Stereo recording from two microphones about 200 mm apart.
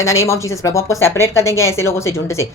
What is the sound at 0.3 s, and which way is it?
Speech, 15° left (ahead or behind).